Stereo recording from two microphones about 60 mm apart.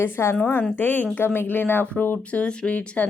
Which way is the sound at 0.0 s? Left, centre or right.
Left.